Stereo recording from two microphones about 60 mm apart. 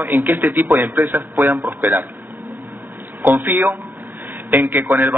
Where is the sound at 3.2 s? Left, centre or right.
Right.